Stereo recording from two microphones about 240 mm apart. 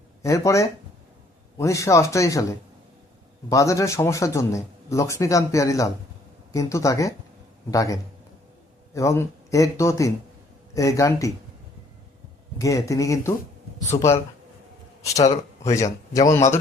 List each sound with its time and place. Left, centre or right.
0.2 s a man's voice: centre
3.5 s a man's voice: centre
9.0 s a man's voice: centre
12.5 s a man's voice: centre
15.2 s speech: centre